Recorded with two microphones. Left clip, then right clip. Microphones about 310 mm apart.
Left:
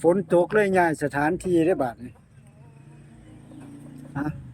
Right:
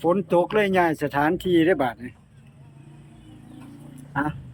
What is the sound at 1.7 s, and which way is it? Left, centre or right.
Speech, centre.